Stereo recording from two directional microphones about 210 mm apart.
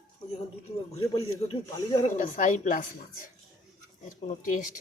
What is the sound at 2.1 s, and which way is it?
Speech, 40° left (ahead or behind).